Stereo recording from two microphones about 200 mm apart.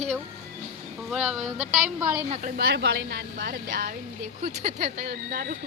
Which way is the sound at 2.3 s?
40° right (ahead or behind).